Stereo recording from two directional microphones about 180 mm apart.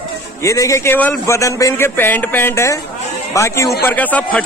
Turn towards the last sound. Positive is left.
turn(degrees=10)  # may be behind; listen again after turning